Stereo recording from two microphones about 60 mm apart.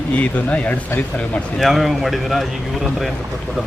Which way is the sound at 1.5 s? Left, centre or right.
Centre.